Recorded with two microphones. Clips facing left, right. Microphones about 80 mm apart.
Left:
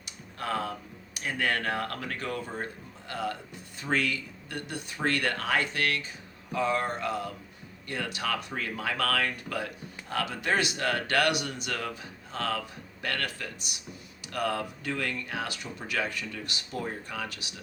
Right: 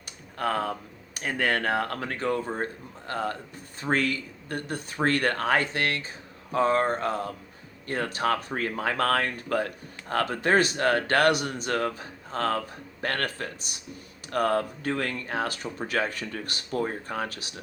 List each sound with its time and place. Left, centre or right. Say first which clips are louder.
0.3 s speech: right 4 dB; right